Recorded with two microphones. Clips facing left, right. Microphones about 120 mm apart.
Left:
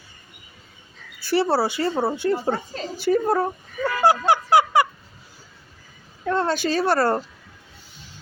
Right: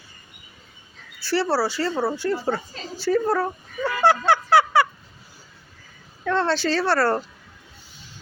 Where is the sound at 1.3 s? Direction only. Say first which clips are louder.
Left 2 dB; 20° left (ahead or behind).